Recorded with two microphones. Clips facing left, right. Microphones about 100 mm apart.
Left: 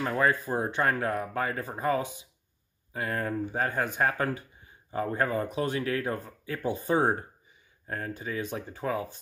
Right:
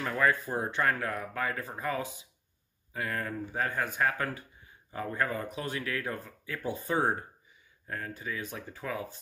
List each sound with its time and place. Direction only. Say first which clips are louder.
0.1 s speech: left 1 dB; 30° left (ahead or behind)
0.5 s speech: left 3 dB; 20° left (ahead or behind)
0.8 s speech: left 3 dB; 30° left (ahead or behind)
2.9 s speech: left 4 dB; 30° left (ahead or behind)
6.6 s speech: left 4 dB; 20° left (ahead or behind)
7.8 s speech: left 3 dB; 35° left (ahead or behind)
8.4 s speech: left 6 dB; 25° left (ahead or behind)